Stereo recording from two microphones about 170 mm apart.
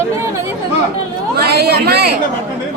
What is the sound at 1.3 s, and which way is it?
Speech, 70° right (ahead or behind).